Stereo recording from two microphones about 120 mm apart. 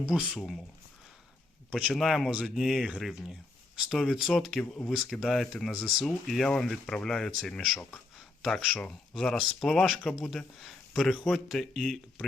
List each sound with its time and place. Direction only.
0.0 s speech: 5° right (ahead or behind)
1.9 s speech: centre (ahead or behind)